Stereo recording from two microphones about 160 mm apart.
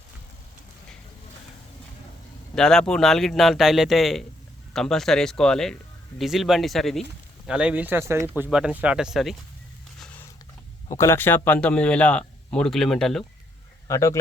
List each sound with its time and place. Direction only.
2.6 s a man's voice: 5° left (ahead or behind)
10.0 s biting: 10° left (ahead or behind)
10.9 s a man's voice: 15° left (ahead or behind)
13.8 s speech: 20° left (ahead or behind)